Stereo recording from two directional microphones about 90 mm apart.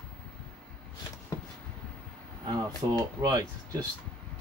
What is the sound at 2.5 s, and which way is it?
Speech, 45° right (ahead or behind).